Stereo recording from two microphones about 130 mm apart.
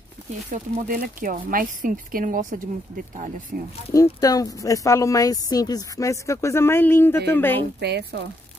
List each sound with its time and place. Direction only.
0.5 s speech: 80° right
3.9 s speech: 25° left (ahead or behind)